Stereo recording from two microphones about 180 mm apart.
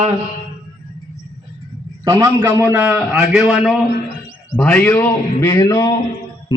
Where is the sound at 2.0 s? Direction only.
20° right (ahead or behind); by 3.8 s centre (ahead or behind).